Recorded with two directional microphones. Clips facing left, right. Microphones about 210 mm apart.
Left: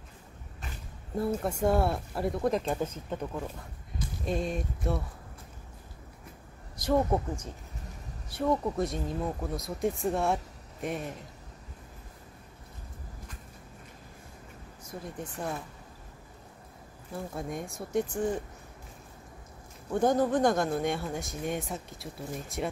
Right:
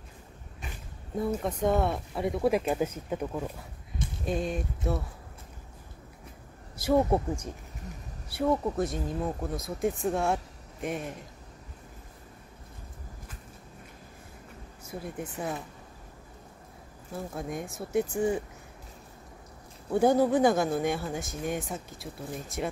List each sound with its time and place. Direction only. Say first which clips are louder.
1.1 s speech: even; 5° left (ahead or behind)
6.8 s speech: right 2 dB; 10° right (ahead or behind)
14.9 s speech: right 2 dB; 5° right (ahead or behind)
17.1 s speech: right 1 dB; centre (ahead or behind)
19.9 s speech: right 3 dB; 10° right (ahead or behind)